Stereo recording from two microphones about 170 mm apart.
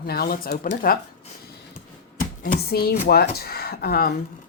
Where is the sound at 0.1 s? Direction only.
60° left (ahead or behind).